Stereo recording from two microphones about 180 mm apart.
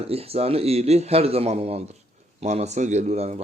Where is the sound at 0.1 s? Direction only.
35° right (ahead or behind).